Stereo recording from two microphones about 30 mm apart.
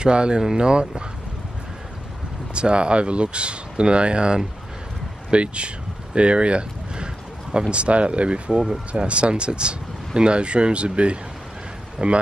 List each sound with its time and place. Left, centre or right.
0.0 s speech: right
2.5 s speech: right